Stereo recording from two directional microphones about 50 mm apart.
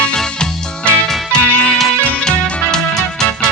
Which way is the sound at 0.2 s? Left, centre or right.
Centre.